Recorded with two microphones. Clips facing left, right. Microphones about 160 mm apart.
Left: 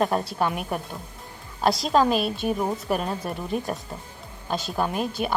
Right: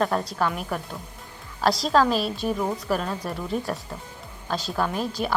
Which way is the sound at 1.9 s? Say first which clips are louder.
Left 1 dB; 20° left (ahead or behind).